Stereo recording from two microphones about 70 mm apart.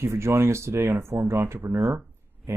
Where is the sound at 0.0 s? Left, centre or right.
Right.